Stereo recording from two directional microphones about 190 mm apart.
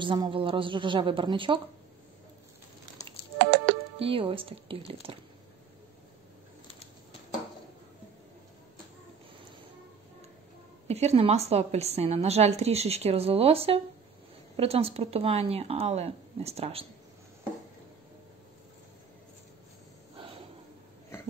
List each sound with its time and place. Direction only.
0.0 s a woman's voice: 25° right (ahead or behind)
3.3 s music: 65° right (ahead or behind)
4.0 s a woman's voice: 30° right (ahead or behind)
6.7 s a sound: 25° left (ahead or behind)
10.9 s a woman's voice: 35° right (ahead or behind)